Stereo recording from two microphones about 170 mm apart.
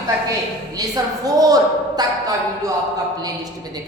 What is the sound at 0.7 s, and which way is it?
A woman's voice, 20° right (ahead or behind).